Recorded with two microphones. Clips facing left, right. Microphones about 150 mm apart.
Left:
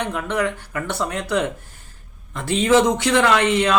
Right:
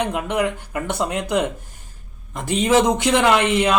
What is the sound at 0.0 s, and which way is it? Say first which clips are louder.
A man's voice: right 2 dB; 15° right (ahead or behind).